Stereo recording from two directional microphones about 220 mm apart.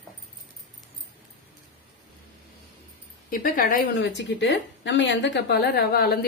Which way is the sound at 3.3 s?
40° left (ahead or behind).